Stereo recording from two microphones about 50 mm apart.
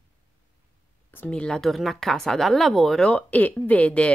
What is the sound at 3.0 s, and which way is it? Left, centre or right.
A woman's voice, left.